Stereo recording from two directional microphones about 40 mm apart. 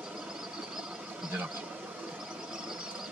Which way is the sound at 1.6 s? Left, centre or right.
Right.